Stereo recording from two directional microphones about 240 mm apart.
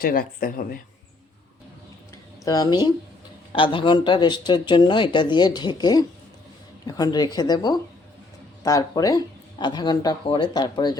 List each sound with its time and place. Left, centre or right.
0.0 s speech: left
2.4 s speech: centre